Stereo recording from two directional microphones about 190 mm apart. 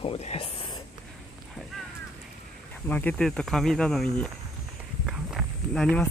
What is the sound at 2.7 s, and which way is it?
Speech, 10° left (ahead or behind).